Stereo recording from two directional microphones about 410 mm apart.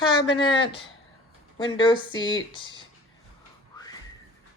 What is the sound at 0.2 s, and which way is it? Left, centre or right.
Speech, centre.